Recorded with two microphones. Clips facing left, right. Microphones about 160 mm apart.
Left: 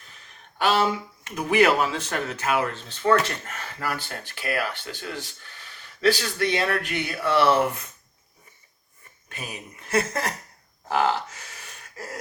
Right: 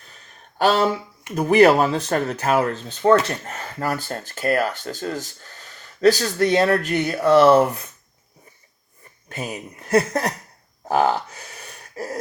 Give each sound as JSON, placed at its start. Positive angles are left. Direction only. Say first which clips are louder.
{"t": 0.6, "sound": "speech", "louder": "right 4 dB", "side_deg": -40}
{"t": 3.1, "sound": "speech", "louder": "right 5 dB", "side_deg": -25}
{"t": 3.8, "sound": "speech", "louder": "right 5 dB", "side_deg": -40}
{"t": 9.9, "sound": "speech", "louder": "right 6 dB", "side_deg": -35}
{"t": 10.8, "sound": "a sound", "louder": "right 4 dB", "side_deg": -40}